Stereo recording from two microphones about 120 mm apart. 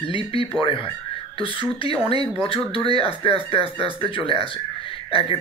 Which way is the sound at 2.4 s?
50° left (ahead or behind).